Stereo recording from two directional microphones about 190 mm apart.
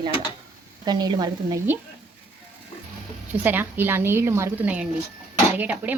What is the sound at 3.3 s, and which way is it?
Speech, 10° right (ahead or behind).